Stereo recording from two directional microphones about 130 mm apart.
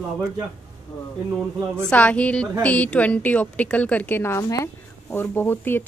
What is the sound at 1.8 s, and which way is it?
A woman's voice, 10° left (ahead or behind).